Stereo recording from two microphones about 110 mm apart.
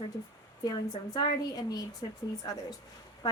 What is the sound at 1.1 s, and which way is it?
A woman's voice, 35° left (ahead or behind).